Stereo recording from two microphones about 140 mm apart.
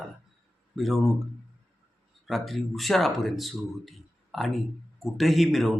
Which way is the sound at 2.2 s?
Centre (ahead or behind).